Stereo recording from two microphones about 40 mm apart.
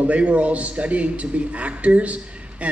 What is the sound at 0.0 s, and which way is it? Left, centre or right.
Speech, right.